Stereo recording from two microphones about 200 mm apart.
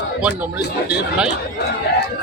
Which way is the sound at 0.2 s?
10° right (ahead or behind).